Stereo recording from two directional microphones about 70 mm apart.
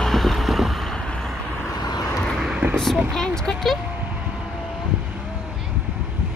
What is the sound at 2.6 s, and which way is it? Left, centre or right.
Vehicle, right.